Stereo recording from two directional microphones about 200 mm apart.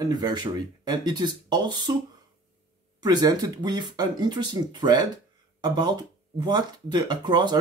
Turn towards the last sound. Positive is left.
turn(degrees=-20)  # may be behind; listen again after turning